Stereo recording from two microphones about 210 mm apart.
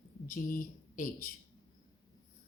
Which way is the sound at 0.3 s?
40° left (ahead or behind).